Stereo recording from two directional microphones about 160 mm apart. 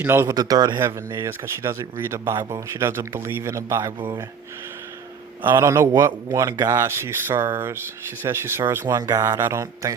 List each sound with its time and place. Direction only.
0.0 s speech: 15° right (ahead or behind)
5.4 s speech: 15° right (ahead or behind)